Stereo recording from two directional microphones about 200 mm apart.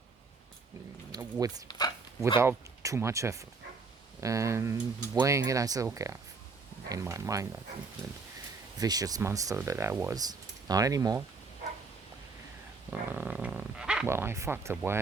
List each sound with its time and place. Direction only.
1.1 s speech: 20° right (ahead or behind)
8.8 s speech: 20° right (ahead or behind)
12.9 s speech: 10° right (ahead or behind)